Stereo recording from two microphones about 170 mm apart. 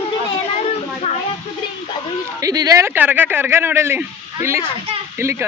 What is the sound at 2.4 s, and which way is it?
Speech, 20° right (ahead or behind).